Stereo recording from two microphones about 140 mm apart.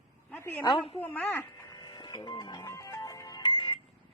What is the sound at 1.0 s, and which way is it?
Speech, 10° left (ahead or behind).